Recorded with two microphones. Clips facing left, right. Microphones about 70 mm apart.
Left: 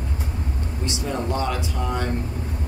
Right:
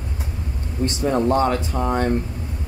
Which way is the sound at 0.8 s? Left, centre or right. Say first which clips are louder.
Right 8 dB; right.